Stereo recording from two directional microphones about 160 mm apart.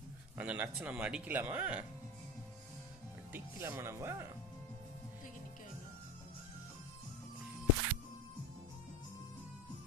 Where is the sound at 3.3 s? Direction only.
15° right (ahead or behind).